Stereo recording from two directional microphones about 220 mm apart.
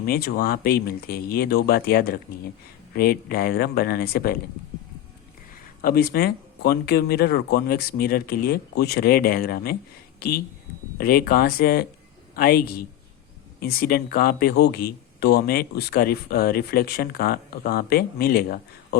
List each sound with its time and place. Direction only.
0.0 s speech: 45° left (ahead or behind)
5.8 s a man's voice: 45° left (ahead or behind)